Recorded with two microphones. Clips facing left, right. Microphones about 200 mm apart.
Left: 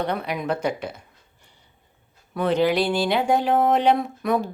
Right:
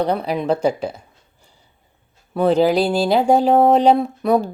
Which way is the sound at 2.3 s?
35° right (ahead or behind).